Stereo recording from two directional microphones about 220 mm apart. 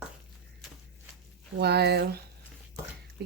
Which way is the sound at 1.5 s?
50° right (ahead or behind).